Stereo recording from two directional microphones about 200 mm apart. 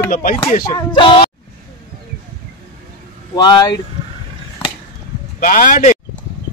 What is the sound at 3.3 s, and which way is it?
Speech, 20° left (ahead or behind).